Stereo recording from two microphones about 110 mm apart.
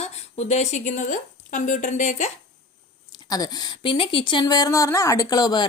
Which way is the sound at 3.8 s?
55° left (ahead or behind).